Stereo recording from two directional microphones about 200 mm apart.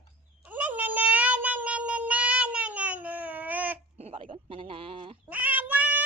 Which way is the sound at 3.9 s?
35° right (ahead or behind).